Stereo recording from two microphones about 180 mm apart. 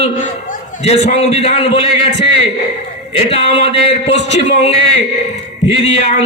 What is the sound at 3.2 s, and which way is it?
Speech, 35° left (ahead or behind).